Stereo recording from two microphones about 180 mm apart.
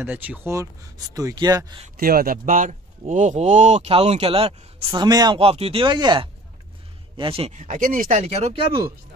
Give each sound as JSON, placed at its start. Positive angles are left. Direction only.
{"t": 0.0, "sound": "speech", "side_deg": -10}
{"t": 2.0, "sound": "speech", "side_deg": -55}